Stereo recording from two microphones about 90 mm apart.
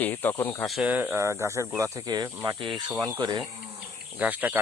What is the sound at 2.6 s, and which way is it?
Speech, 65° right (ahead or behind).